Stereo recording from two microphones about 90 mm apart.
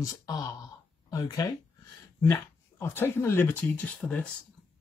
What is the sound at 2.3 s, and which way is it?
Speech, 30° left (ahead or behind).